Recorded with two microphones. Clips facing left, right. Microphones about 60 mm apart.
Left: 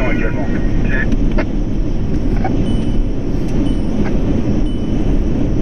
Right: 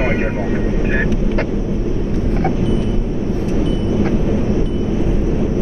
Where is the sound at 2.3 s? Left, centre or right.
Centre.